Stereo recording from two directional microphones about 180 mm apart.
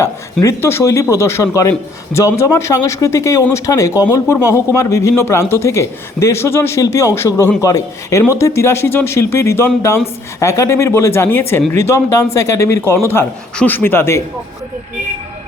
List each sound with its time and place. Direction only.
0.0 s a man's voice: 15° left (ahead or behind)